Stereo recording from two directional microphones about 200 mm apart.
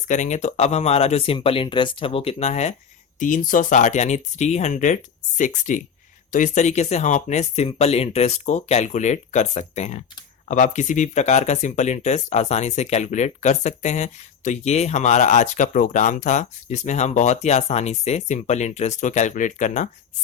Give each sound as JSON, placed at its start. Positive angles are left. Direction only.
{"t": 0.1, "sound": "speech", "side_deg": 35}